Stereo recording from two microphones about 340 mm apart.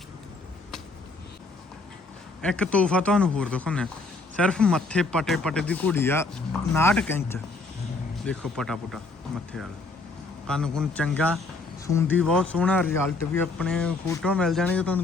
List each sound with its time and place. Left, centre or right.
2.4 s speech: centre
10.4 s speech: centre